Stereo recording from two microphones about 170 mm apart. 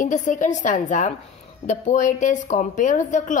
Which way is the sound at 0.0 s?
50° left (ahead or behind).